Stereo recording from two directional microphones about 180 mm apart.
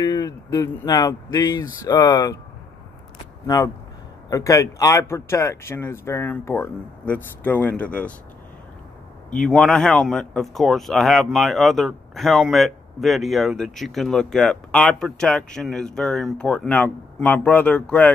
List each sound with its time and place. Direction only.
0.0 s speech: 20° left (ahead or behind)
3.4 s speech: 20° left (ahead or behind)
9.5 s speech: 5° left (ahead or behind)